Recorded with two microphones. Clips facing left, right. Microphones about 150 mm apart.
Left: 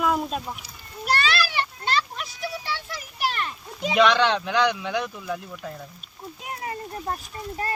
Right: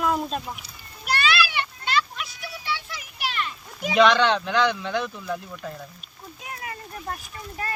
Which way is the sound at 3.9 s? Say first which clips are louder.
Right 1 dB; centre (ahead or behind).